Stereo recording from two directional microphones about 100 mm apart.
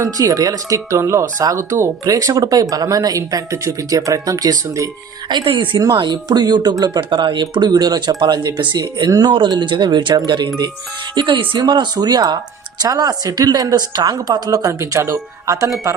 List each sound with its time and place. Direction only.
0.0 s speech: 35° right (ahead or behind)
5.3 s a woman's voice: 55° right (ahead or behind)
6.0 s speech: 45° right (ahead or behind)
14.7 s speech: 30° right (ahead or behind)